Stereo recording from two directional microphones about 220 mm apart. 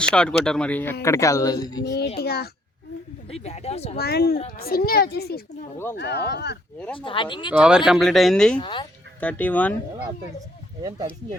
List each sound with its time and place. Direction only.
0.1 s a woman's voice: 5° left (ahead or behind)
1.8 s a child's voice: 50° left (ahead or behind)
3.2 s speech: 30° left (ahead or behind)
3.9 s a child's voice: 45° left (ahead or behind)
6.9 s speech: 25° left (ahead or behind)
7.5 s speech: 5° right (ahead or behind)
8.6 s speech: 20° left (ahead or behind)
9.2 s a woman's voice: 5° left (ahead or behind)
10.8 s speech: 15° right (ahead or behind)